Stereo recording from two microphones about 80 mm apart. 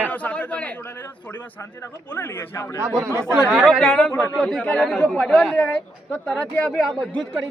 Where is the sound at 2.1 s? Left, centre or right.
Left.